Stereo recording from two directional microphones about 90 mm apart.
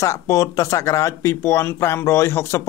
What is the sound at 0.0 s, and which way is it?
Speech, 35° left (ahead or behind).